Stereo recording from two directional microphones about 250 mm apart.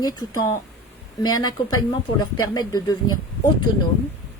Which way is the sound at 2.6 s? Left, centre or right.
Centre.